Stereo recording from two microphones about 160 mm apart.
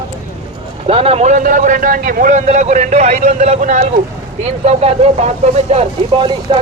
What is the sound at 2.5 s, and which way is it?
A man's voice, 45° right (ahead or behind).